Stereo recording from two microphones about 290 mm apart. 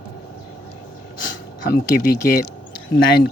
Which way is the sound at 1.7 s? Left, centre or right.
Left.